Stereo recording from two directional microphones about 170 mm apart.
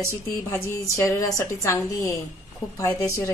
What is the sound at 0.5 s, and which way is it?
A woman's voice, 15° left (ahead or behind).